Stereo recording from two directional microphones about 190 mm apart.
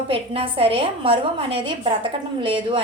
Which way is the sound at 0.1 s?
30° right (ahead or behind).